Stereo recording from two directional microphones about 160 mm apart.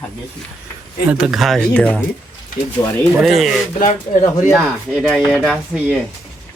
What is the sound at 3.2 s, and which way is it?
Speech, centre (ahead or behind).